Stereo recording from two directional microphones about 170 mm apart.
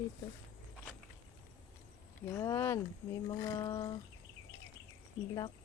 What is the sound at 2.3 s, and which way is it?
Speech, 15° left (ahead or behind).